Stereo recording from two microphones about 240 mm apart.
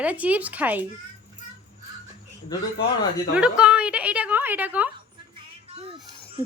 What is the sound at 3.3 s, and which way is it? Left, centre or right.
A woman's voice, centre.